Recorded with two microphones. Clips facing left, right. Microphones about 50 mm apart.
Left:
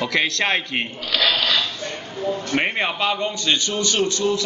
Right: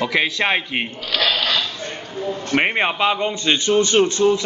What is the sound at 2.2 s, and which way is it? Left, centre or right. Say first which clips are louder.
Speech: right 2 dB; right.